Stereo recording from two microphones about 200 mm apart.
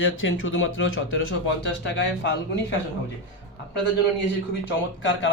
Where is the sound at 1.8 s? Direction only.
60° left (ahead or behind).